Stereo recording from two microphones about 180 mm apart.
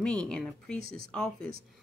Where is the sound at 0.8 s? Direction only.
55° right (ahead or behind).